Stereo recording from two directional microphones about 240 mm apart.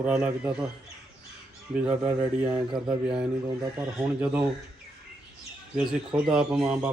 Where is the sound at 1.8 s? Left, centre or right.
Centre.